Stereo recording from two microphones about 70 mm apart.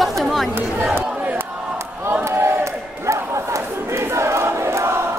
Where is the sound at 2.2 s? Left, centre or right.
Right.